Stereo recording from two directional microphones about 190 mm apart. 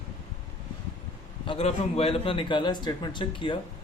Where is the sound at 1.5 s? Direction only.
30° left (ahead or behind).